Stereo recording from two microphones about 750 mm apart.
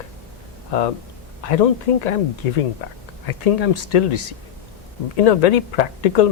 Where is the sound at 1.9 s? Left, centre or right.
Left.